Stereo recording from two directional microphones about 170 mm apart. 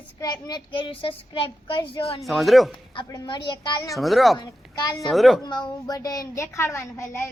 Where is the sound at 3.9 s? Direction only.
Centre (ahead or behind).